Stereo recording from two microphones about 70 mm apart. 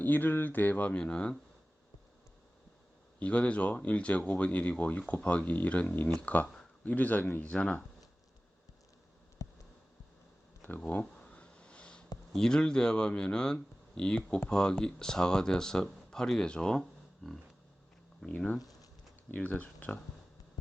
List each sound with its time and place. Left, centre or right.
0.0 s speech: left
3.2 s speech: centre
7.5 s speech: centre
10.6 s speech: left
11.2 s sniff: centre
12.3 s speech: centre
17.2 s a sound: centre
18.3 s speech: centre
18.6 s a sound: left
19.3 s speech: left